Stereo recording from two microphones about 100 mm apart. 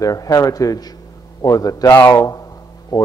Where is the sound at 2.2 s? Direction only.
35° left (ahead or behind).